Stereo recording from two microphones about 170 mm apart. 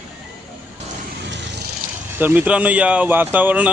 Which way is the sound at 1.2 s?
90° right.